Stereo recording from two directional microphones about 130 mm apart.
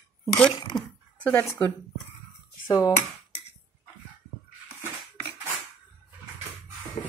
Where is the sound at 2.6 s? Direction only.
30° left (ahead or behind).